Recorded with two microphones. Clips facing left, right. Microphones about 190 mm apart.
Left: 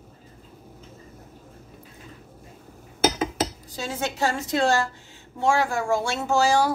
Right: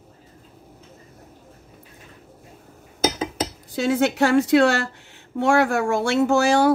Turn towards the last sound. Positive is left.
turn(degrees=-60)  # may be behind; listen again after turning